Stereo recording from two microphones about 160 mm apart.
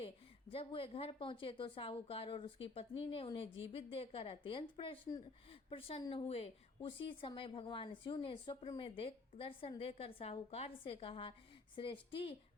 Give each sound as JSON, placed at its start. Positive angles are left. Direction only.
{"t": 0.5, "sound": "a woman's voice", "side_deg": 35}